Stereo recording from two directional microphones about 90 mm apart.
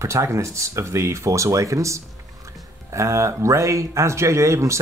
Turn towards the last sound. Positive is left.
turn(degrees=-35)  # may be behind; listen again after turning